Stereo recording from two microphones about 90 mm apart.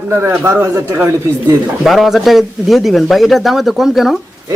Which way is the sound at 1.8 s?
Centre (ahead or behind).